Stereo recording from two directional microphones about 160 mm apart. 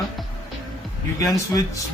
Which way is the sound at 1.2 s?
20° left (ahead or behind).